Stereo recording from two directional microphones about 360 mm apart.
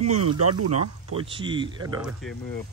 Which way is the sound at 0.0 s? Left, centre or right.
Right.